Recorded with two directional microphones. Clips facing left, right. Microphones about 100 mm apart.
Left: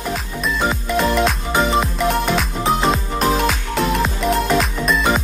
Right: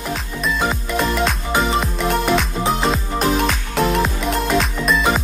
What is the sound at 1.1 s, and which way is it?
Music, centre (ahead or behind).